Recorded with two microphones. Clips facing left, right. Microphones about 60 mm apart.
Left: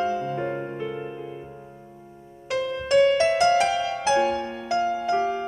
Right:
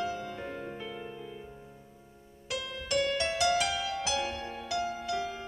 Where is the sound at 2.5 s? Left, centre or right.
Left.